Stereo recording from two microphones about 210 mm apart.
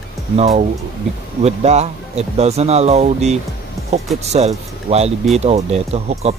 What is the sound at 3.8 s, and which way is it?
Music, 15° left (ahead or behind).